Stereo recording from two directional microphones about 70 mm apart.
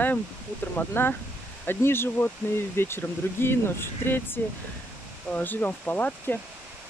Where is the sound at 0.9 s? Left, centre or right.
Left.